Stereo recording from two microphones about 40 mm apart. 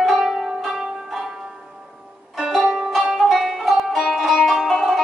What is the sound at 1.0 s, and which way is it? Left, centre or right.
Zither, centre.